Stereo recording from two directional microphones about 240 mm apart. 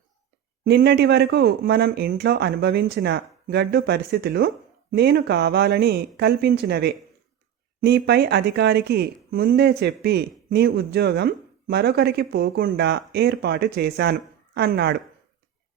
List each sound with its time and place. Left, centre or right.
0.6 s speech: right